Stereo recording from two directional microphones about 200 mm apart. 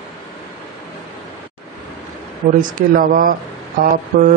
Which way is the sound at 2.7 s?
45° right (ahead or behind).